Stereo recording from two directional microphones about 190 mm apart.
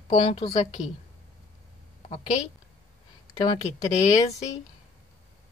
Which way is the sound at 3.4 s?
20° left (ahead or behind).